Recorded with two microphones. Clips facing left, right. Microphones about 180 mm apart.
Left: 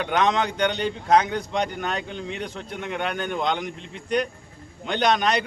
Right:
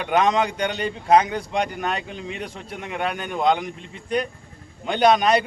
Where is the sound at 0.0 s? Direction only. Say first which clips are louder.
Right 2 dB; 10° right (ahead or behind).